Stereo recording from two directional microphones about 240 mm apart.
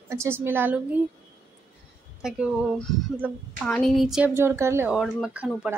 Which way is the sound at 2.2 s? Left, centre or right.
Centre.